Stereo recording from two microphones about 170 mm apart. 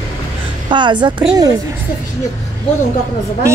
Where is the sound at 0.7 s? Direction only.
25° right (ahead or behind).